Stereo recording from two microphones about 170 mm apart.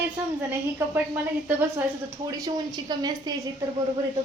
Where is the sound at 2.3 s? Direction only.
25° right (ahead or behind).